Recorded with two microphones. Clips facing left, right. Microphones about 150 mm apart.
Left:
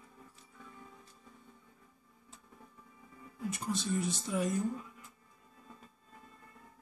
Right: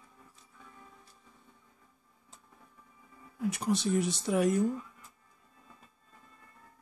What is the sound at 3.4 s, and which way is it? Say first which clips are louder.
Speech: right 6 dB; 75° right (ahead or behind).